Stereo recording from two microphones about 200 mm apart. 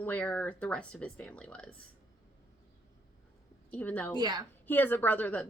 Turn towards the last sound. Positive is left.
turn(degrees=10)  # may be behind; listen again after turning